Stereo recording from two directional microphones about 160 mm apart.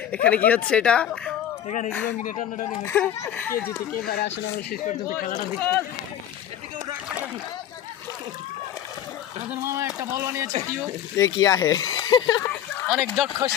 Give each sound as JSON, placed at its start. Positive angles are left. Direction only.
{"t": 0.3, "sound": "speech", "side_deg": 10}
{"t": 2.2, "sound": "speech", "side_deg": 60}
{"t": 2.6, "sound": "speech", "side_deg": 20}
{"t": 3.0, "sound": "speech", "side_deg": 10}
{"t": 4.0, "sound": "speech", "side_deg": 70}
{"t": 5.5, "sound": "speech", "side_deg": 10}
{"t": 9.5, "sound": "speech", "side_deg": -15}
{"t": 11.2, "sound": "speech", "side_deg": 20}
{"t": 12.9, "sound": "speech", "side_deg": 0}